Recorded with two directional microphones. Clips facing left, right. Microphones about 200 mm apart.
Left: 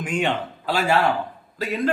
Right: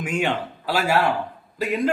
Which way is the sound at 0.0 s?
5° right (ahead or behind).